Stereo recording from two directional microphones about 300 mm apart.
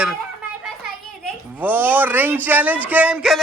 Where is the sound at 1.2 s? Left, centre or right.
Centre.